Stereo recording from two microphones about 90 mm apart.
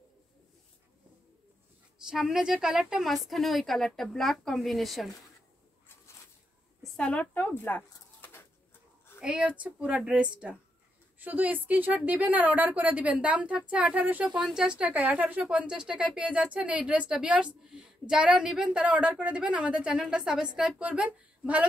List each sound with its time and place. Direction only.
2.0 s a woman's voice: 5° right (ahead or behind)
7.0 s speech: 15° left (ahead or behind)
9.2 s a woman's voice: 10° right (ahead or behind)